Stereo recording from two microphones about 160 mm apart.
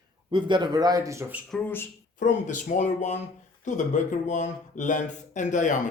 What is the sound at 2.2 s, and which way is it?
Speech, 55° left (ahead or behind).